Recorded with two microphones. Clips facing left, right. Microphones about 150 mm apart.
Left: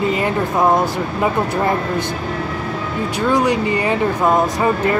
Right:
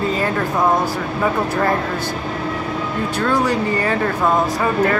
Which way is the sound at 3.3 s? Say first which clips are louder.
Left 3 dB; 15° left (ahead or behind).